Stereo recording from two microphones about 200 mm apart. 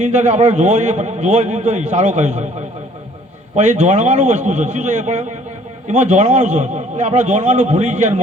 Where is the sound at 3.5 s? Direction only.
35° right (ahead or behind).